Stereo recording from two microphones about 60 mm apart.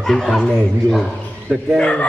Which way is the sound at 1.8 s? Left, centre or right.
Left.